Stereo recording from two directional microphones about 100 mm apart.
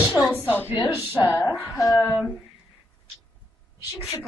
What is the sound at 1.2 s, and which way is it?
Speech, 15° right (ahead or behind).